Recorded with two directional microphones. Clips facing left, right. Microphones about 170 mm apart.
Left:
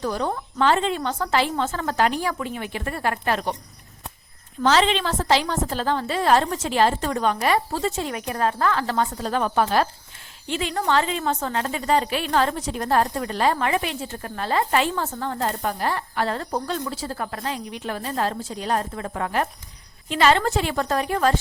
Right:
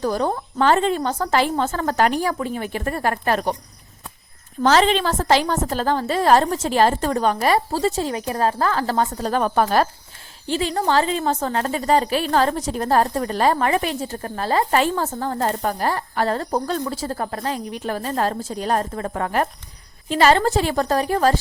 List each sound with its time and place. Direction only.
0.0 s a woman's voice: 40° right (ahead or behind)
4.6 s a woman's voice: 45° right (ahead or behind)